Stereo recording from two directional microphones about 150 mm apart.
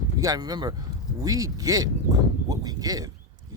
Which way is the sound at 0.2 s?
25° right (ahead or behind).